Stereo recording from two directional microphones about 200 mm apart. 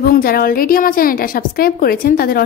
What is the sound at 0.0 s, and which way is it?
A woman's voice, 50° left (ahead or behind).